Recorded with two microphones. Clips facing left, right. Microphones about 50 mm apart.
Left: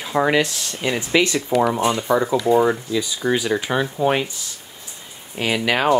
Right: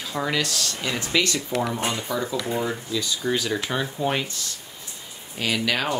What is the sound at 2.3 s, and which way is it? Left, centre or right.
Speech, left.